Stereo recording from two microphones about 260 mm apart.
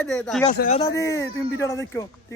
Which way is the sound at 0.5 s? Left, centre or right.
Left.